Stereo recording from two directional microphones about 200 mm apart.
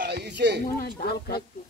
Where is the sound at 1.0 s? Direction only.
50° left (ahead or behind).